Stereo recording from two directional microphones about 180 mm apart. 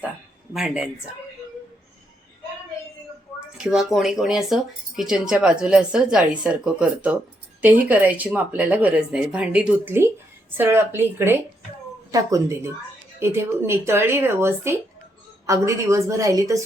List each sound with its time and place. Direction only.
0.5 s speech: 5° right (ahead or behind)
3.6 s speech: centre (ahead or behind); by 16.6 s 20° right (ahead or behind)